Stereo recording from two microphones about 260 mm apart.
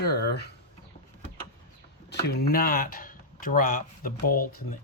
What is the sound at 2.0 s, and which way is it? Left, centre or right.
Speech, left.